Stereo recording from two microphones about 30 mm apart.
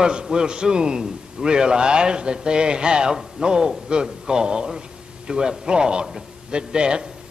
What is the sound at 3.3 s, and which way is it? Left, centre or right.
A man's voice, right.